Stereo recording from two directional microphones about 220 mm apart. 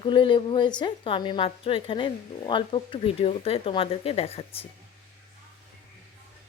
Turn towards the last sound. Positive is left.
turn(degrees=25)  # may be behind; listen again after turning